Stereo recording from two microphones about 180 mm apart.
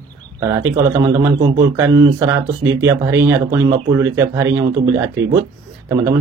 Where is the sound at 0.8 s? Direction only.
30° right (ahead or behind).